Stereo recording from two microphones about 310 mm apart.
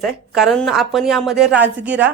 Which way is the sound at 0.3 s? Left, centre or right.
Centre.